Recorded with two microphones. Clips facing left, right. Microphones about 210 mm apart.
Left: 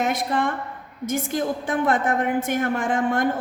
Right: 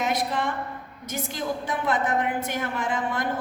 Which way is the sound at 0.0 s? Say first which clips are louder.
Left 3 dB; 50° left (ahead or behind).